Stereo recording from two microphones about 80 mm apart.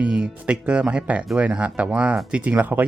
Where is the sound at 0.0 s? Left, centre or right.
Centre.